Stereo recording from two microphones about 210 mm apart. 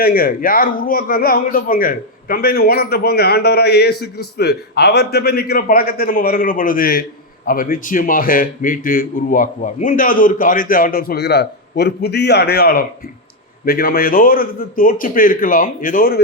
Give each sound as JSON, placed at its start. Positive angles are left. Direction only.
{"t": 0.0, "sound": "speech", "side_deg": 45}